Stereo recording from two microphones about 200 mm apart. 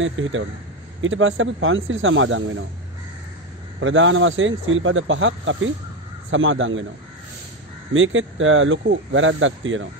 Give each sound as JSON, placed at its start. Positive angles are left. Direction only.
{"t": 0.0, "sound": "speech", "side_deg": -75}
{"t": 3.8, "sound": "speech", "side_deg": -75}
{"t": 7.9, "sound": "speech", "side_deg": -75}